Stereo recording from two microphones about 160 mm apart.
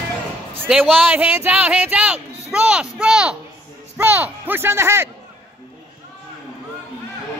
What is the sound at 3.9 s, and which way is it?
Speech, 10° right (ahead or behind).